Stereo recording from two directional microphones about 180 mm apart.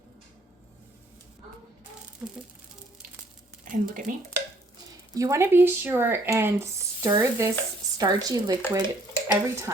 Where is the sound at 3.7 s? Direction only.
45° right (ahead or behind).